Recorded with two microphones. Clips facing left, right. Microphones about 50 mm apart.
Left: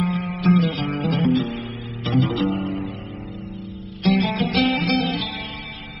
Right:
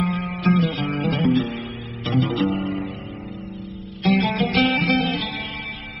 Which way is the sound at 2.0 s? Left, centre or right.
Right.